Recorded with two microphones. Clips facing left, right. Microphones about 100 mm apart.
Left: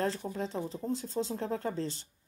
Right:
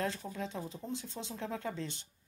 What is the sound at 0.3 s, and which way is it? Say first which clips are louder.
Speech: left 5 dB; 35° left (ahead or behind).